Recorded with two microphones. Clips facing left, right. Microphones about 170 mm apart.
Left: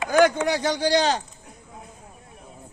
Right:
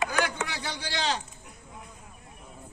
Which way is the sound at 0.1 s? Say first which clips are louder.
Left 11 dB; 45° left (ahead or behind).